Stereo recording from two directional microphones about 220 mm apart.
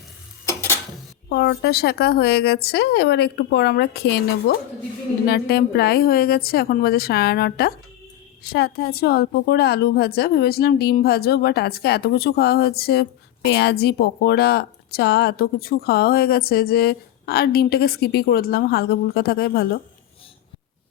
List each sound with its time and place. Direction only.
1.3 s a woman's voice: 50° left (ahead or behind)